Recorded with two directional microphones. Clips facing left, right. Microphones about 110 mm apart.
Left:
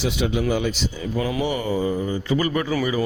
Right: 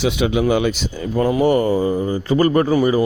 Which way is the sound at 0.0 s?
65° right (ahead or behind).